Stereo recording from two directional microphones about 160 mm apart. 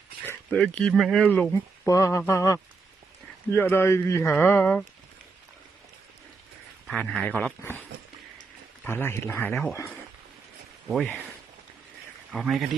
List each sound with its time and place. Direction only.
0.3 s speech: 5° left (ahead or behind)
1.9 s speech: 20° left (ahead or behind)
6.8 s speech: 5° left (ahead or behind)
10.8 s a man's voice: centre (ahead or behind)
12.3 s a man's voice: centre (ahead or behind)